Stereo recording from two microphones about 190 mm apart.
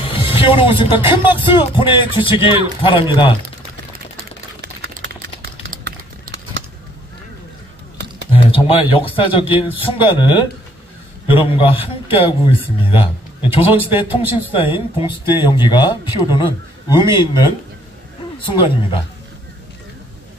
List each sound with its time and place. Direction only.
0.0 s music: 30° left (ahead or behind)
1.1 s speech: 25° left (ahead or behind)
4.6 s a sound: 60° right (ahead or behind)
8.3 s speech: 30° left (ahead or behind)
12.9 s a sound: 25° left (ahead or behind)
13.9 s speech: 25° left (ahead or behind)
18.5 s speech: 25° left (ahead or behind)